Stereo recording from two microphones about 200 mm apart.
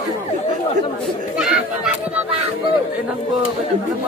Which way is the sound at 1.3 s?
5° right (ahead or behind).